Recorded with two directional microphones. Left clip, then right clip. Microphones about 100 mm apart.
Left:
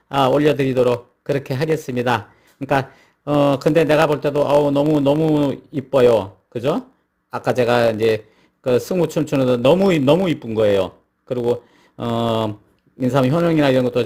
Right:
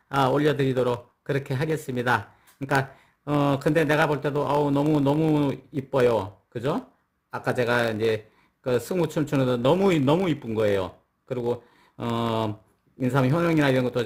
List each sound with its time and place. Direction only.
0.3 s a man's voice: 25° left (ahead or behind)
2.6 s speech: 5° left (ahead or behind)
3.2 s a man's voice: 30° left (ahead or behind)
4.8 s speech: 5° left (ahead or behind)
5.5 s a man's voice: 35° left (ahead or behind)